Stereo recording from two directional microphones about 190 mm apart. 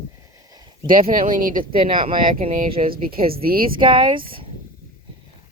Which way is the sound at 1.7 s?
25° right (ahead or behind).